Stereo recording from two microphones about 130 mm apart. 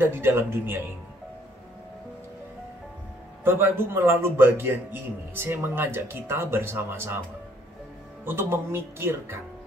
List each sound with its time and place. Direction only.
0.0 s a man's voice: 20° right (ahead or behind)
3.4 s a man's voice: 20° right (ahead or behind)
8.3 s speech: 20° right (ahead or behind)